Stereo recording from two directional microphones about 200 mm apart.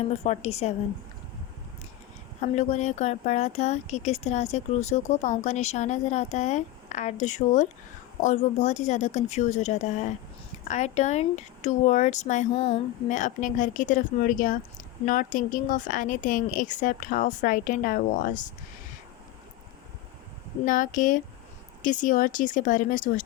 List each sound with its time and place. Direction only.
0.3 s speech: 30° left (ahead or behind)
2.4 s speech: 35° left (ahead or behind)
20.7 s speech: 40° left (ahead or behind)